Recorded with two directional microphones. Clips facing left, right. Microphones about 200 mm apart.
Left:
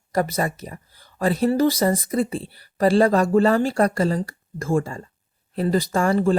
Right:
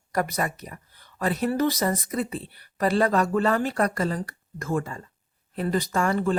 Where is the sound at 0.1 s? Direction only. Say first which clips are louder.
Left 4 dB; 25° left (ahead or behind).